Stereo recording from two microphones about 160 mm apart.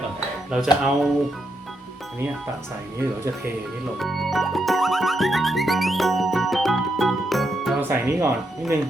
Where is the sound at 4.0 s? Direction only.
Centre (ahead or behind).